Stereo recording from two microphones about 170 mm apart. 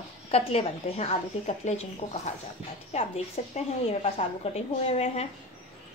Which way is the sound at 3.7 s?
35° left (ahead or behind).